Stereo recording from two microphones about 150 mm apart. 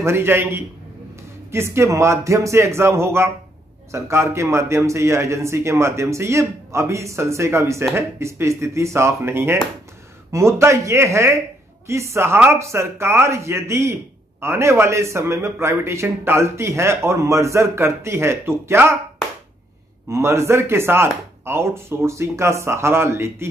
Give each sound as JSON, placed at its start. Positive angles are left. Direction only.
{"t": 0.0, "sound": "a man's voice", "side_deg": -15}
{"t": 20.1, "sound": "a man's voice", "side_deg": -15}